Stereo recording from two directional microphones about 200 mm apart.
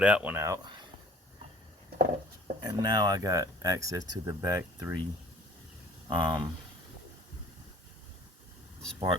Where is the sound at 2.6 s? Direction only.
20° right (ahead or behind).